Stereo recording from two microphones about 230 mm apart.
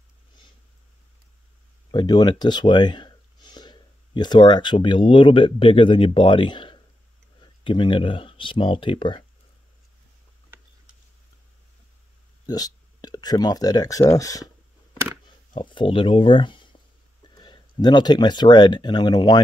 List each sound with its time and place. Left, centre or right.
1.9 s speech: centre
12.4 s speech: centre
15.5 s speech: left